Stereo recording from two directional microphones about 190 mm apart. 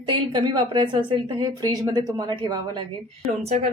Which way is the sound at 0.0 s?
25° right (ahead or behind).